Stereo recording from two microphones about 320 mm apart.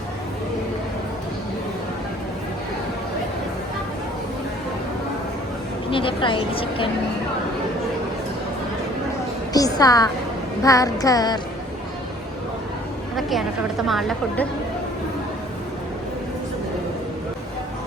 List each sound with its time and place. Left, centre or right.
5.9 s a woman's voice: centre
9.5 s a woman's voice: centre
13.8 s a woman's voice: centre